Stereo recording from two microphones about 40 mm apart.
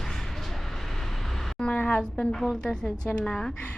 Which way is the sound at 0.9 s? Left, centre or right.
Centre.